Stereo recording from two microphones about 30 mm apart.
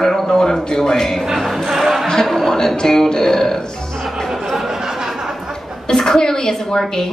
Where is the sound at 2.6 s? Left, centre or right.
Centre.